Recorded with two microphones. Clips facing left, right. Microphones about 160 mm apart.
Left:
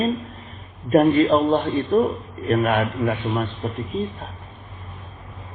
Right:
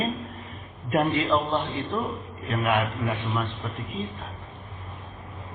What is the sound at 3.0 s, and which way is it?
Speech, 50° left (ahead or behind).